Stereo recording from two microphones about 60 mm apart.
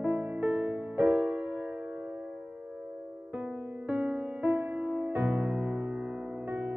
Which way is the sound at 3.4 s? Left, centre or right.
Right.